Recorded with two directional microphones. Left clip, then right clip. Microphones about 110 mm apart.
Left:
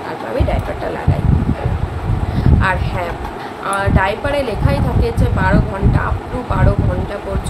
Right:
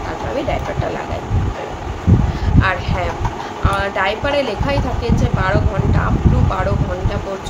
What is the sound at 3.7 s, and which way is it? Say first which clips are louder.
Speech: left 1 dB; 10° left (ahead or behind).